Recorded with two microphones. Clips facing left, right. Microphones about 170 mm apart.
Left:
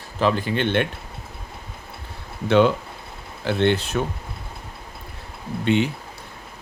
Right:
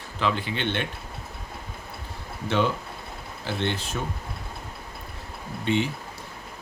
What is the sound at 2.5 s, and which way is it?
Speech, 65° left (ahead or behind).